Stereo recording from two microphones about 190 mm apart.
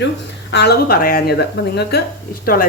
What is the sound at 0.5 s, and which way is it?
Speech, 60° left (ahead or behind).